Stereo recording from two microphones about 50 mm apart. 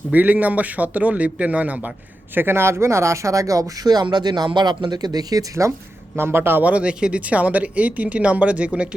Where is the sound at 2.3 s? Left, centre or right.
Right.